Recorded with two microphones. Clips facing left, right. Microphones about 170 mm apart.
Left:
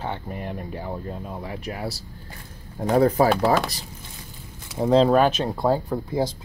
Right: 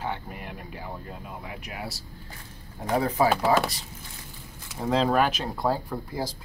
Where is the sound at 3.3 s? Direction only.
5° right (ahead or behind).